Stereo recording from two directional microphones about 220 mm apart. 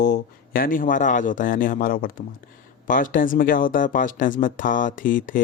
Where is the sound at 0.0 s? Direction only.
40° left (ahead or behind).